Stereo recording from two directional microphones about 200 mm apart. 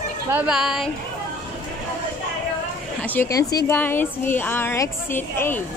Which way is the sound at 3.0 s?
10° left (ahead or behind).